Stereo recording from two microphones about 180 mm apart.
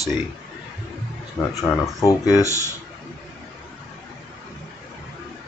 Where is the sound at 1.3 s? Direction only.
15° left (ahead or behind).